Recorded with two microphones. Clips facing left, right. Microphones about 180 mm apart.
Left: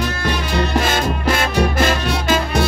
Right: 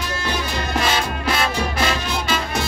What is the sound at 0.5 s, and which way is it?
Music, 45° left (ahead or behind).